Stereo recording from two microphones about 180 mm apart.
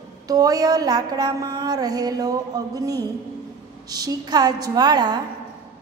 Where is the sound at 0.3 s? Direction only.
20° right (ahead or behind).